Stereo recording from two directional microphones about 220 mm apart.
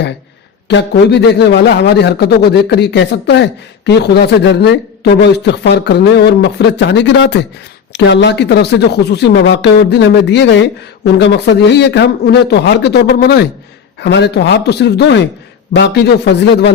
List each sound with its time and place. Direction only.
0.7 s a man's voice: 55° left (ahead or behind)